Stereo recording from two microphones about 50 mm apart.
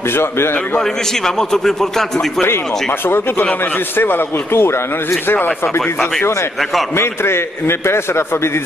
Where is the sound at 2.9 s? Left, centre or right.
Left.